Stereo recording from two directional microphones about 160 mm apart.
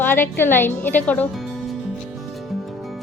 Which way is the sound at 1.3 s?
Centre (ahead or behind).